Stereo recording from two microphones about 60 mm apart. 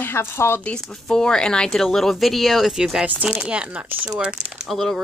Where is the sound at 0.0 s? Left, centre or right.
Left.